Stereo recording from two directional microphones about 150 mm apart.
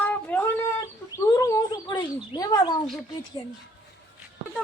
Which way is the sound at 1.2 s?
25° left (ahead or behind).